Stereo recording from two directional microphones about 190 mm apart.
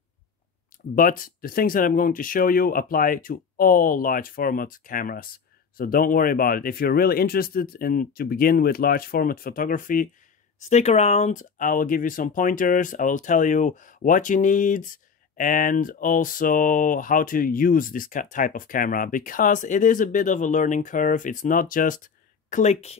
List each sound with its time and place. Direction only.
0.9 s speech: 45° left (ahead or behind)
10.7 s speech: 35° left (ahead or behind)